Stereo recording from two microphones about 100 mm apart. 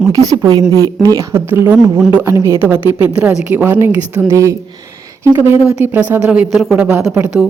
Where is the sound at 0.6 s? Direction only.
30° left (ahead or behind).